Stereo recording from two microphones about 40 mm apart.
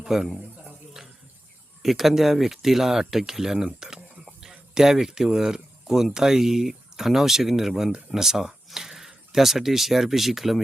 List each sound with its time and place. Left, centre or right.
0.0 s a man's voice: centre
1.8 s speech: centre
3.8 s a sound: centre
4.4 s speech: centre